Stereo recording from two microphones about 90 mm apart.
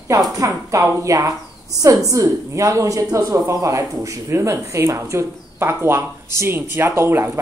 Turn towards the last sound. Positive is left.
turn(degrees=-25)  # may be behind; listen again after turning